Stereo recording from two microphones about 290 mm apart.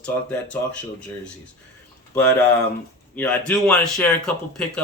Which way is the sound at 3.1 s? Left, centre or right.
Centre.